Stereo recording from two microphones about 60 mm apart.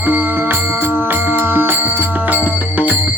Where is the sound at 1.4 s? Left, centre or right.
Right.